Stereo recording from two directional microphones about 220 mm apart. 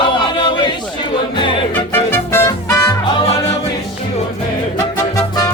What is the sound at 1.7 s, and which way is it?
Music, 10° left (ahead or behind).